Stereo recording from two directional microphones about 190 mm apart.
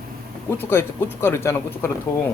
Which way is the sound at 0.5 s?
10° left (ahead or behind).